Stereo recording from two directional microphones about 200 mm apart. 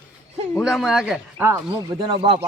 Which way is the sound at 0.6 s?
Centre (ahead or behind).